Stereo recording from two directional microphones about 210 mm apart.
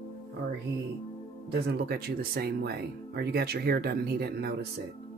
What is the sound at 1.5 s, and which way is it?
Speech, 50° right (ahead or behind).